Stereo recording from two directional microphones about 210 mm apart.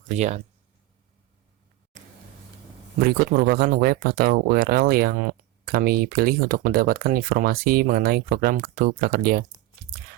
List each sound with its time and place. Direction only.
1.9 s vehicle: 35° right (ahead or behind)
3.0 s speech: 45° right (ahead or behind)